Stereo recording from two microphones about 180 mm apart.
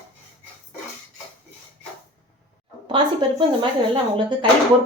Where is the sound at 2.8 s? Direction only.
30° right (ahead or behind).